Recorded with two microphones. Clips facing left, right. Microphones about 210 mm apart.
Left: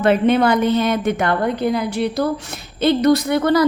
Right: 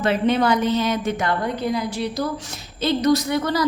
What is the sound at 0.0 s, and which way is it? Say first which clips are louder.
A woman's voice: left 4 dB; 55° left (ahead or behind).